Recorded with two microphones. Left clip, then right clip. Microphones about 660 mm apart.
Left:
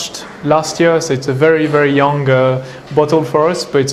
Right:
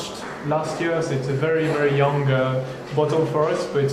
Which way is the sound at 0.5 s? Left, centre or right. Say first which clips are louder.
Left 11 dB; left.